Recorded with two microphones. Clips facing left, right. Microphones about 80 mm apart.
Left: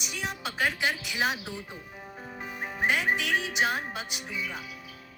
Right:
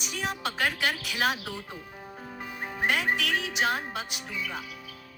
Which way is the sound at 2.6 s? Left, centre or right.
Centre.